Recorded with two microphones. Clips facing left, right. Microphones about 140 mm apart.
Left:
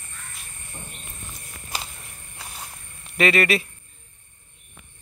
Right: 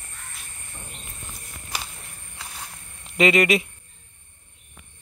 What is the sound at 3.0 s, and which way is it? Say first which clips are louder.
Speech: right 2 dB; 20° right (ahead or behind).